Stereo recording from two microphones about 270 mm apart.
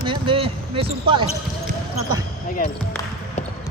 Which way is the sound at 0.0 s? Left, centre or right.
Centre.